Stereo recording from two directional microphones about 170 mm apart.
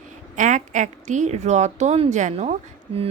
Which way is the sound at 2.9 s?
35° right (ahead or behind).